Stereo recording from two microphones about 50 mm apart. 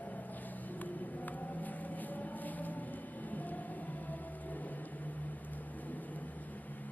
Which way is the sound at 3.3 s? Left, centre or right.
Left.